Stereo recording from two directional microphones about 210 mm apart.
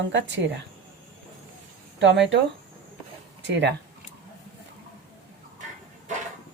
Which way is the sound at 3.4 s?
55° right (ahead or behind).